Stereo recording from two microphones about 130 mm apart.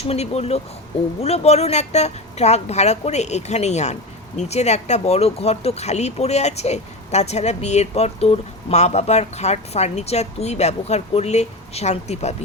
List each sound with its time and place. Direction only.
0.0 s speech: 55° left (ahead or behind)